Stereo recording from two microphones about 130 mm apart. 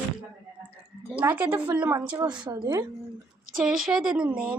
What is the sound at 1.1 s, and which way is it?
Speech, 10° right (ahead or behind).